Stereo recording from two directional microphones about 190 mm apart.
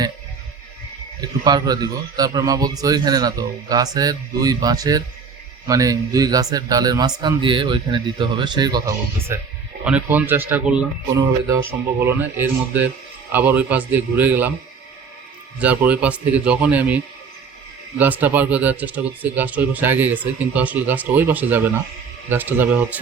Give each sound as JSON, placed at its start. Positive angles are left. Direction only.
{"t": 1.2, "sound": "a man's voice", "side_deg": -20}
{"t": 11.9, "sound": "speech", "side_deg": -10}
{"t": 15.5, "sound": "speech", "side_deg": -10}